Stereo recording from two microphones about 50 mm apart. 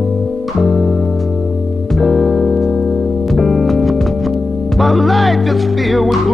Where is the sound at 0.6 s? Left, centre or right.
Centre.